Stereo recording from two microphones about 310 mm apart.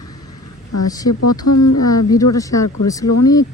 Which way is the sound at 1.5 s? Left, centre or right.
Left.